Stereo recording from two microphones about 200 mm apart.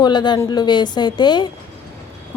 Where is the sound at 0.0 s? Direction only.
20° left (ahead or behind).